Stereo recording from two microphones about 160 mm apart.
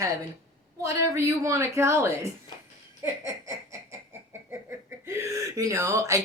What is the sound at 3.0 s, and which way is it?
Baby laughter, 20° right (ahead or behind).